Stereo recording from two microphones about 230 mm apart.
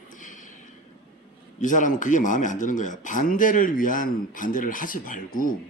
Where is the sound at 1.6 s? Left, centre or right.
Left.